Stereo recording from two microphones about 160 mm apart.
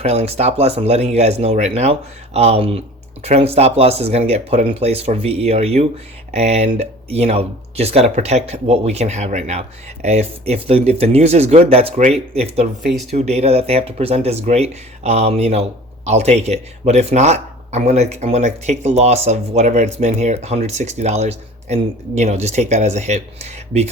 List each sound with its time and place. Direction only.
0.0 s speech: 40° right (ahead or behind)